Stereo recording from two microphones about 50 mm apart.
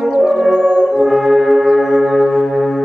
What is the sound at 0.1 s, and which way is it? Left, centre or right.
Music, centre.